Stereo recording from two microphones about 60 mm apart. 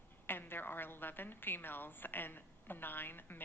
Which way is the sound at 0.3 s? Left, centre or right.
Left.